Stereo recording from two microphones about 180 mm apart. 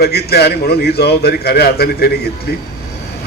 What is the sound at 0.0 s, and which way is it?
A man's voice, 60° left (ahead or behind).